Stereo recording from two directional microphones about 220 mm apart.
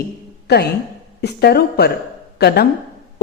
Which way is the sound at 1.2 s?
45° left (ahead or behind).